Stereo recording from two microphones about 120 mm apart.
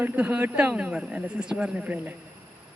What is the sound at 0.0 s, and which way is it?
A man's voice, 15° right (ahead or behind).